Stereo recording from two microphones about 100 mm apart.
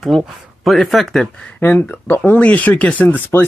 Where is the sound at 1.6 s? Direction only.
15° left (ahead or behind).